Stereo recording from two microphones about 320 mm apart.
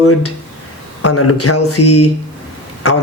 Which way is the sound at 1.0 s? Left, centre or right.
Left.